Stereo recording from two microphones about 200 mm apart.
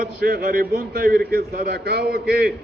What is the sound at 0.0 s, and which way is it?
A man's voice, 50° right (ahead or behind).